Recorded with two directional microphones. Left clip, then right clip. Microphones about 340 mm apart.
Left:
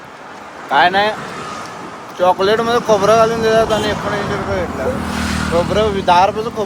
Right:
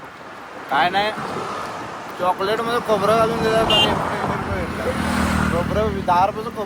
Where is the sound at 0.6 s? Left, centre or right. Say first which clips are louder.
Left 6 dB; centre.